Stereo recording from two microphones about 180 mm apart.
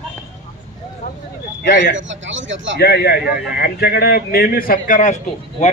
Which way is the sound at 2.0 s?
90° right.